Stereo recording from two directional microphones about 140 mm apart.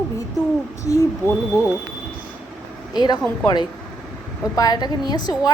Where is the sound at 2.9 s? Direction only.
30° left (ahead or behind).